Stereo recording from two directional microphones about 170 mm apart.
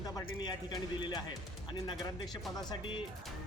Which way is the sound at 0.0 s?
25° left (ahead or behind).